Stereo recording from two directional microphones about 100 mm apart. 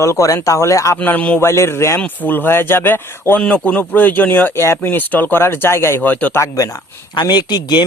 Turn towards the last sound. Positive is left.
turn(degrees=45)  # may be behind; listen again after turning